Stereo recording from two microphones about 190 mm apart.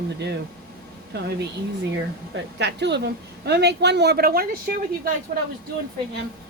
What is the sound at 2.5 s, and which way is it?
Speech, 65° right (ahead or behind).